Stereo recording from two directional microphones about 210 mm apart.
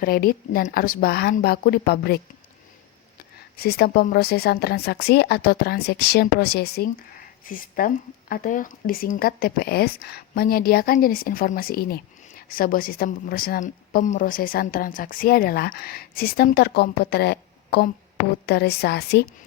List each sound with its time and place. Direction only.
0.0 s speech: 45° left (ahead or behind)
3.6 s speech: 50° left (ahead or behind)